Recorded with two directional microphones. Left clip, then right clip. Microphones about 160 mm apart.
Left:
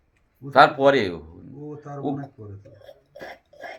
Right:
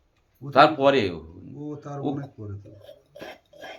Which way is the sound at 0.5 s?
15° left (ahead or behind).